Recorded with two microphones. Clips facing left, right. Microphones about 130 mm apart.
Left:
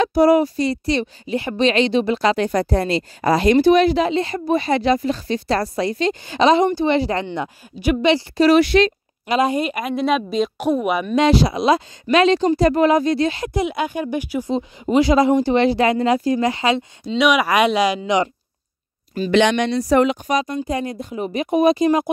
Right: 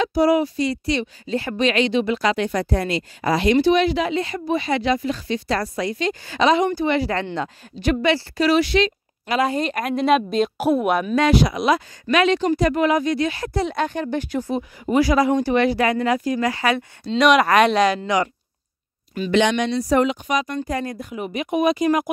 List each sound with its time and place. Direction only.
0.0 s speech: 50° left (ahead or behind)
1.2 s speech: 15° left (ahead or behind)
1.6 s a woman's voice: 30° left (ahead or behind)
7.3 s speech: 10° left (ahead or behind)
8.5 s speech: 55° left (ahead or behind)
9.3 s a woman's voice: 20° left (ahead or behind)
9.6 s speech: 5° left (ahead or behind)
11.1 s speech: 30° left (ahead or behind)
13.4 s speech: 15° left (ahead or behind)
14.5 s a woman's voice: 20° left (ahead or behind)
17.1 s speech: 5° left (ahead or behind); by 18.3 s 20° left (ahead or behind)
19.3 s speech: 70° left (ahead or behind)
20.2 s speech: 35° left (ahead or behind)
20.6 s a woman's voice: 20° left (ahead or behind)